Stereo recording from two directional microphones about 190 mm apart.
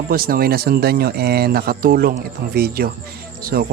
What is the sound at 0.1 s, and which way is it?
Speech, 50° right (ahead or behind).